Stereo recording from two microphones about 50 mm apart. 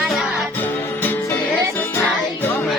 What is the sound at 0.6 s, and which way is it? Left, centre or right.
Music, left.